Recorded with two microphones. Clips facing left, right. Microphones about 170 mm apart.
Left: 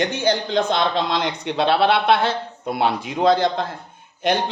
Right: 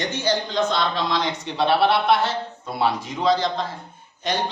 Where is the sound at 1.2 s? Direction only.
70° left (ahead or behind).